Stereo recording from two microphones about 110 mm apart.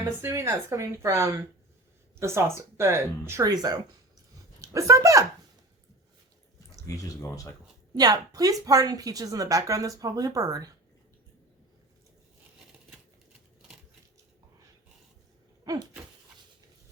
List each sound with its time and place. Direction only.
0.2 s speech: 25° right (ahead or behind)
3.5 s speech: 35° right (ahead or behind)
6.8 s speech: 30° left (ahead or behind)
7.9 s speech: 35° right (ahead or behind)
15.6 s a sound: 35° right (ahead or behind)